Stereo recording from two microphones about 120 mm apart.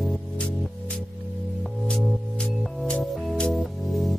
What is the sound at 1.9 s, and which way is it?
Music, 5° left (ahead or behind).